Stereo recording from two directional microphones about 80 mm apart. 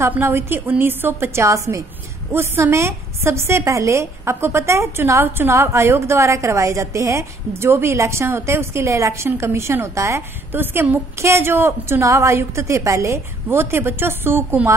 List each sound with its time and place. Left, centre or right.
0.1 s a woman's voice: right